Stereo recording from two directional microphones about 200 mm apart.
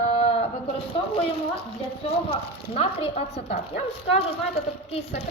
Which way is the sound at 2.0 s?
30° left (ahead or behind).